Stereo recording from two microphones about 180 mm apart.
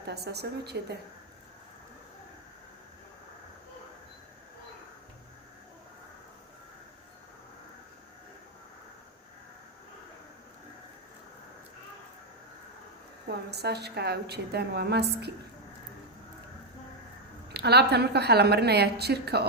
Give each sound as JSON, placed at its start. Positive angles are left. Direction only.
{"t": 0.0, "sound": "a woman's voice", "side_deg": -65}
{"t": 13.2, "sound": "a woman's voice", "side_deg": -65}
{"t": 17.5, "sound": "a woman's voice", "side_deg": -65}